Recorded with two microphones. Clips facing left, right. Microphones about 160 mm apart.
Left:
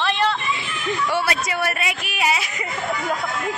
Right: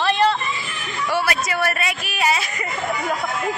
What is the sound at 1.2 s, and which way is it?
Speech, 20° left (ahead or behind).